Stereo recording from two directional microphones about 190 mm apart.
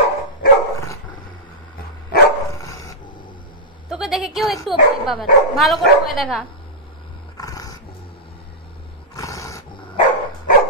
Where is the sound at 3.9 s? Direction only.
Centre (ahead or behind).